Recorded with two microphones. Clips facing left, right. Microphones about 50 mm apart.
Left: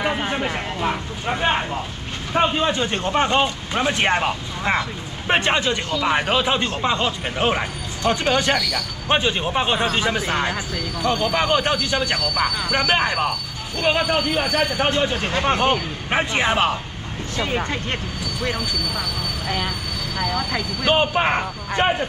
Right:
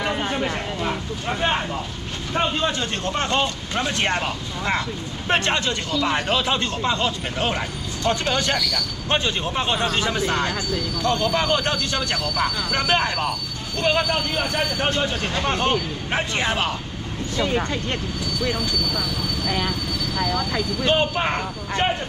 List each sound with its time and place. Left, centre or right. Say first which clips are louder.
0.0 s speech: left 1 dB; centre